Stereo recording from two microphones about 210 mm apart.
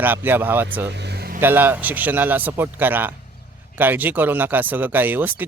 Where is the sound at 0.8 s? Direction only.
55° right (ahead or behind).